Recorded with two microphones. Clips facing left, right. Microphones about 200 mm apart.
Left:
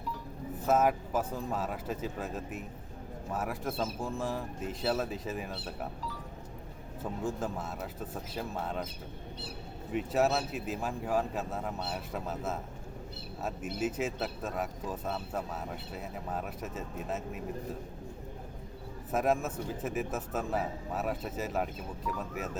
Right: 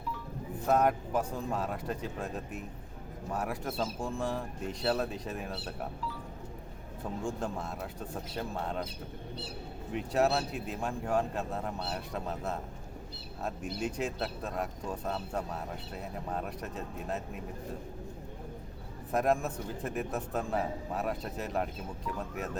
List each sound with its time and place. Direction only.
0.7 s speech: 5° left (ahead or behind)
7.3 s speech: 5° left (ahead or behind)
9.9 s speech: centre (ahead or behind)
19.1 s speech: 5° left (ahead or behind)